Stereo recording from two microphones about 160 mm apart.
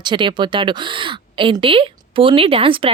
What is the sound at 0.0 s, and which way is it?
Speech, 30° right (ahead or behind).